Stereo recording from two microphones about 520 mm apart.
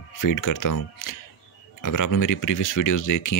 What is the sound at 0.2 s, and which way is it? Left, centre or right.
Speech, left.